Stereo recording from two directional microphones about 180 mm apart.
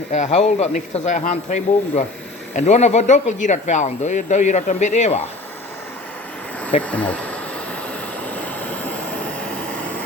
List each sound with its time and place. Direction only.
0.1 s speech: 40° left (ahead or behind)
6.8 s speech: 10° left (ahead or behind)
8.3 s train: 10° left (ahead or behind)